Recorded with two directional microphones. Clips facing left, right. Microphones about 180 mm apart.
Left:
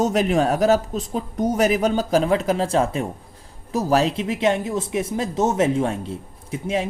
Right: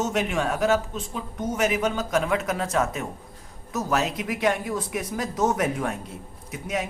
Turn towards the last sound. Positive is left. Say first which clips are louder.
# left 5 dB
turn(degrees=30)  # may be behind; listen again after turning